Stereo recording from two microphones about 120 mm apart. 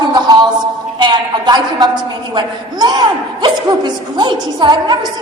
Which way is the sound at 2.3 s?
35° right (ahead or behind).